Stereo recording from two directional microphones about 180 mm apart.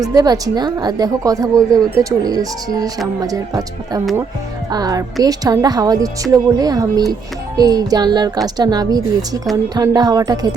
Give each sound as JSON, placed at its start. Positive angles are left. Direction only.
{"t": 0.0, "sound": "a child's voice", "side_deg": -20}